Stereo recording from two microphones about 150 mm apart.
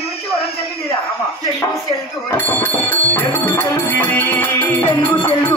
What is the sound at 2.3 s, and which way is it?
Music, 15° left (ahead or behind).